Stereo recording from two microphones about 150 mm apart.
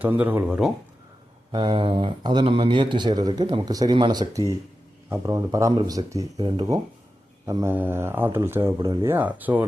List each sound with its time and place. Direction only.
0.0 s speech: 10° right (ahead or behind)
1.5 s speech: 35° right (ahead or behind)
7.4 s speech: 20° right (ahead or behind)
9.1 s speech: 10° right (ahead or behind)